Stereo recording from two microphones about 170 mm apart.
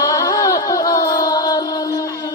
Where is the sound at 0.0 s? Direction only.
20° left (ahead or behind).